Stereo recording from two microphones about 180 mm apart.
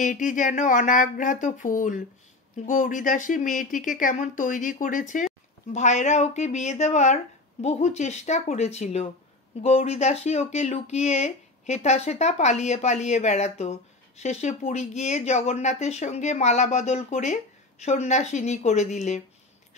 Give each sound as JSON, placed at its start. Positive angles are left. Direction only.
{"t": 0.0, "sound": "speech", "side_deg": 45}